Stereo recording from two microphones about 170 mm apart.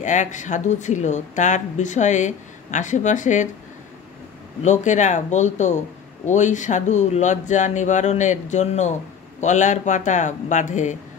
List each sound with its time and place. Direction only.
0.0 s a woman's voice: 45° left (ahead or behind)
4.6 s a woman's voice: 45° left (ahead or behind)